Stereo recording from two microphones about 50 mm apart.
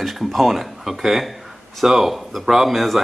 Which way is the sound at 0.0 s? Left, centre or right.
Centre.